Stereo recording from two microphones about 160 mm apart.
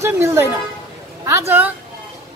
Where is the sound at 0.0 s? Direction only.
15° right (ahead or behind).